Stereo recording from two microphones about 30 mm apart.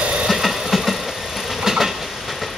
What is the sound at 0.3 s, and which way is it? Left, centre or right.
Train, centre.